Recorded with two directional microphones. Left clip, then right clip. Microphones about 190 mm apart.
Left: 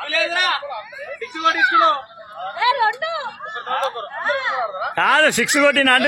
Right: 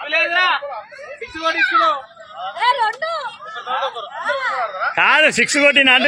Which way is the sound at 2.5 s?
10° left (ahead or behind).